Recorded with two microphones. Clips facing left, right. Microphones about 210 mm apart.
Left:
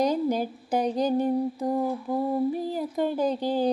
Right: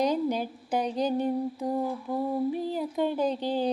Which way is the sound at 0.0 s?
45° left (ahead or behind).